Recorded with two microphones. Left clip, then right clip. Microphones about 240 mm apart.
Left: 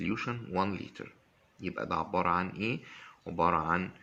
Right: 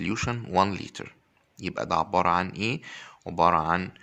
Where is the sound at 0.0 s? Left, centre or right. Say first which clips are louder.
Right 5 dB; right.